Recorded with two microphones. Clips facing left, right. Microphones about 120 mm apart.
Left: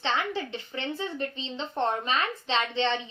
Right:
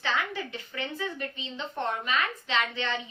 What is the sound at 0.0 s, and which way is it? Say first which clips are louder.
Speech: left 2 dB; 30° left (ahead or behind).